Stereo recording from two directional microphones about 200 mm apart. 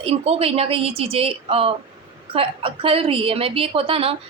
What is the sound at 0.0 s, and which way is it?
A woman's voice, 30° right (ahead or behind).